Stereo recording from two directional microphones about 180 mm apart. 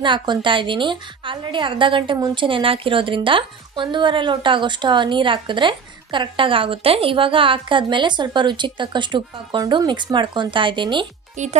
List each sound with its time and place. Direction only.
0.0 s a woman's voice: 25° right (ahead or behind)